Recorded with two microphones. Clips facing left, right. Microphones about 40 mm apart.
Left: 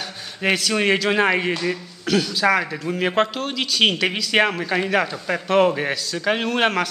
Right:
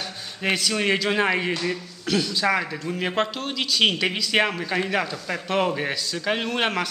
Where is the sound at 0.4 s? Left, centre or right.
Centre.